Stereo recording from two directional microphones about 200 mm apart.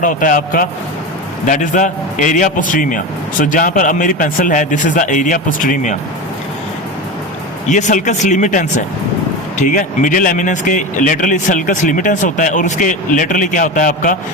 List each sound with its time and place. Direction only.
0.0 s speech: 40° left (ahead or behind)
7.7 s speech: 40° left (ahead or behind)